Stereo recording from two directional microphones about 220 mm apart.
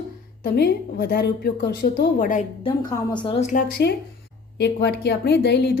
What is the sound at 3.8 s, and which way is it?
A woman's voice, 50° left (ahead or behind).